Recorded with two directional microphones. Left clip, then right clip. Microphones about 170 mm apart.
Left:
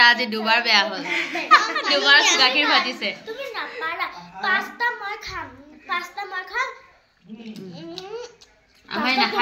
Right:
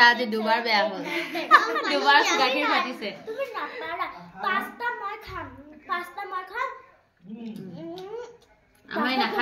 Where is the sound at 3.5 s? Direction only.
30° right (ahead or behind).